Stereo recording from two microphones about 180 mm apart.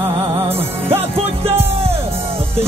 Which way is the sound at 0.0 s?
30° right (ahead or behind).